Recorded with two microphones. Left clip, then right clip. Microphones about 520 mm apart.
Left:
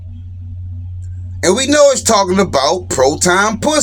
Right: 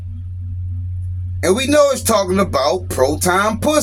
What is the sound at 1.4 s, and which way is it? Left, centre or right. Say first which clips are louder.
Speech: left 3 dB; right.